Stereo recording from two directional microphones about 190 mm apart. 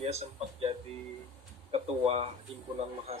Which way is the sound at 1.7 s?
30° right (ahead or behind).